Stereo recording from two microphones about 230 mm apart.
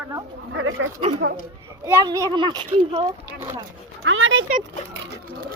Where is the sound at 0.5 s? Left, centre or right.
Right.